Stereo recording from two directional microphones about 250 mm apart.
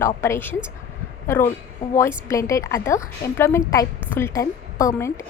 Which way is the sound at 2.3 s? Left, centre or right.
Centre.